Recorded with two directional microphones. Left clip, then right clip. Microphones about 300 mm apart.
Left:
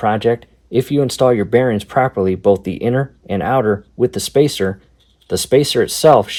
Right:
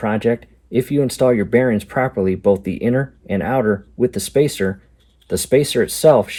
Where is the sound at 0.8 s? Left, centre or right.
Centre.